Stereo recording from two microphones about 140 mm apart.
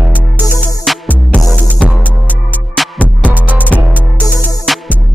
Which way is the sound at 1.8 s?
10° right (ahead or behind).